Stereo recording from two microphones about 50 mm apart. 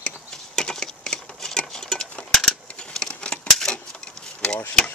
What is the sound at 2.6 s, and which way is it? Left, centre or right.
Scissors, centre.